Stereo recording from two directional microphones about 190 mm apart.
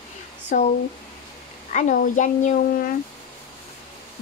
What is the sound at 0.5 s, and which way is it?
Speech, 45° left (ahead or behind).